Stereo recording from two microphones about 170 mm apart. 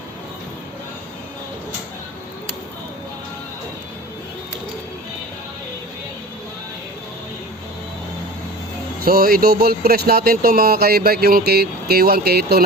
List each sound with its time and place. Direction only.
9.0 s speech: 60° right (ahead or behind)